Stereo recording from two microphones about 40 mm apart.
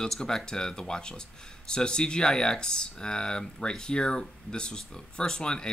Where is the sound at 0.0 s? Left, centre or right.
Centre.